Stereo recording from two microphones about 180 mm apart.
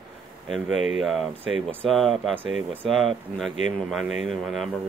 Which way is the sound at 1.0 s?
Centre (ahead or behind).